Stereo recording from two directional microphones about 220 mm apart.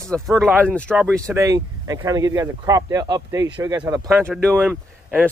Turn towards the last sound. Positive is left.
turn(degrees=-5)  # may be behind; listen again after turning